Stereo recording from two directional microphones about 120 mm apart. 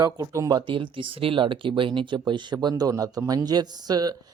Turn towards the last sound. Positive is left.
turn(degrees=-35)  # may be behind; listen again after turning